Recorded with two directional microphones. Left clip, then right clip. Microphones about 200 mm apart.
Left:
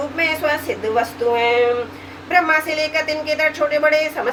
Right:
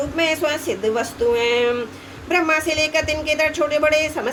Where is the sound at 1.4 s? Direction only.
55° right (ahead or behind).